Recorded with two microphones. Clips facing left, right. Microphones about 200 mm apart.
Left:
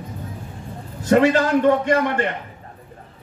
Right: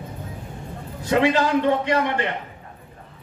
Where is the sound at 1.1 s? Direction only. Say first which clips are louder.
Left 3 dB; 45° left (ahead or behind).